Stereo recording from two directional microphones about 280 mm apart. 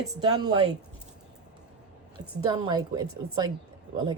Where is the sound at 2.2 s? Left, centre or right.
Centre.